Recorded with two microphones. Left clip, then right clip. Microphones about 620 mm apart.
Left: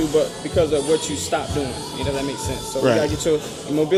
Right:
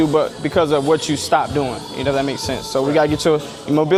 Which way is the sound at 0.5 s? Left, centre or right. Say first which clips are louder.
Right 3 dB; right.